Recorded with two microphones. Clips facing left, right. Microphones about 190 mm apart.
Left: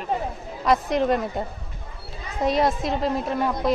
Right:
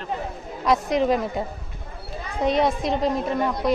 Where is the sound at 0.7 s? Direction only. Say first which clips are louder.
Even; centre (ahead or behind).